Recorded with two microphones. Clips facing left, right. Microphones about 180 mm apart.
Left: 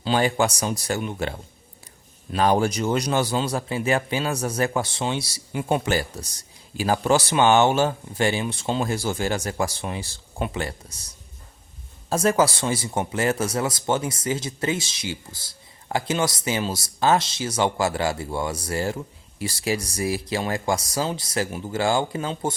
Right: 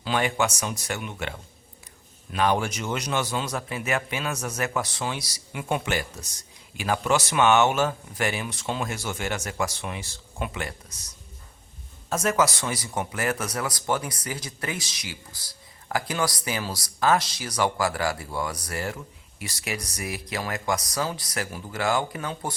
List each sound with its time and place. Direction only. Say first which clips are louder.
0.0 s speech: left 4 dB; 30° left (ahead or behind)
12.0 s speech: left 4 dB; 30° left (ahead or behind)